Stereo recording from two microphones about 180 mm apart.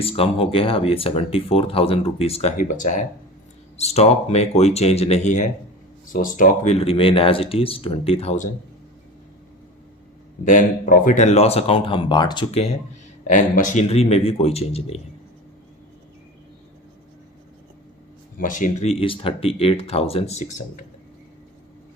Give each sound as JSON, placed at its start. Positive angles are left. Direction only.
{"t": 0.0, "sound": "speech", "side_deg": 30}
{"t": 2.6, "sound": "speech", "side_deg": 45}
{"t": 10.4, "sound": "speech", "side_deg": 45}
{"t": 18.3, "sound": "speech", "side_deg": 45}